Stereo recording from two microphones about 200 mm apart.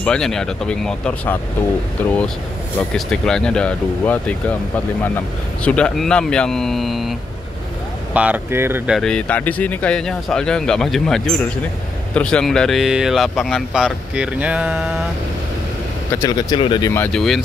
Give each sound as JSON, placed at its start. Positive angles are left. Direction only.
{"t": 0.0, "sound": "speech", "side_deg": 5}
{"t": 5.6, "sound": "speech", "side_deg": 5}
{"t": 16.2, "sound": "speech", "side_deg": 20}
{"t": 16.9, "sound": "speech", "side_deg": 5}